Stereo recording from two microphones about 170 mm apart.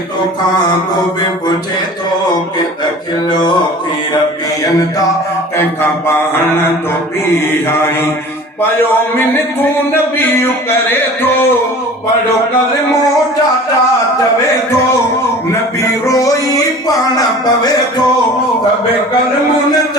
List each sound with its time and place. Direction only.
5.8 s music: 15° left (ahead or behind)
10.8 s music: 10° left (ahead or behind)
16.0 s music: 20° left (ahead or behind)